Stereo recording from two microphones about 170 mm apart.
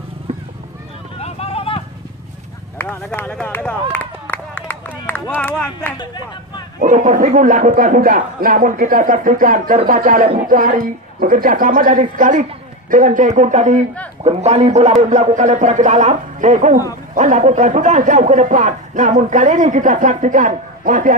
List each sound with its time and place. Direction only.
1.2 s a sound: 35° left (ahead or behind)
2.8 s run: 10° left (ahead or behind)
5.4 s speech: 5° left (ahead or behind)
5.9 s speech: 25° left (ahead or behind)
6.8 s speech: 50° right (ahead or behind)